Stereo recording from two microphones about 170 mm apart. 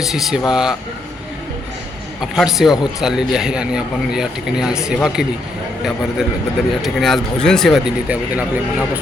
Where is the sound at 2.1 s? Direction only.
5° right (ahead or behind).